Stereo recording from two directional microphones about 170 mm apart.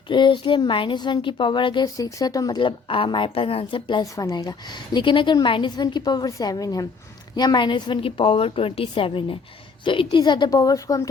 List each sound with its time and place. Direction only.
0.1 s a woman's voice: 30° left (ahead or behind)